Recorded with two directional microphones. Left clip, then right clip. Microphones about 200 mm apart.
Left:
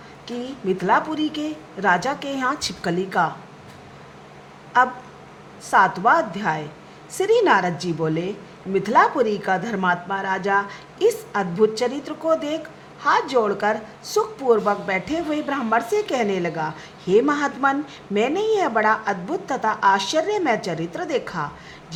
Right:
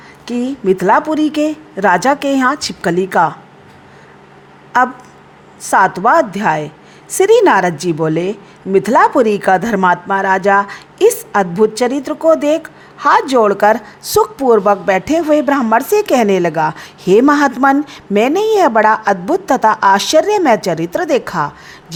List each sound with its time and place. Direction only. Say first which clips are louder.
0.3 s a woman's voice: right 11 dB; 40° right (ahead or behind)
2.6 s a woman's voice: right 8 dB; 25° right (ahead or behind)
3.0 s a woman's voice: right 9 dB; 35° right (ahead or behind)
4.7 s a woman's voice: right 5 dB; 40° right (ahead or behind)